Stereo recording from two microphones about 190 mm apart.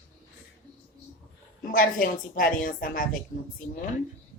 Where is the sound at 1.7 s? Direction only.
45° left (ahead or behind).